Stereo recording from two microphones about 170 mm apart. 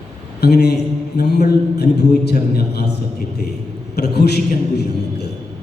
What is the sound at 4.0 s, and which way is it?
A man's voice, 75° left (ahead or behind).